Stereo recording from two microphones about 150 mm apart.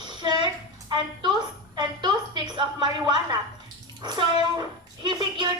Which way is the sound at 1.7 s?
30° right (ahead or behind).